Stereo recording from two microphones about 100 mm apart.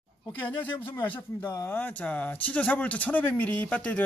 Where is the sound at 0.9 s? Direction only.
20° left (ahead or behind).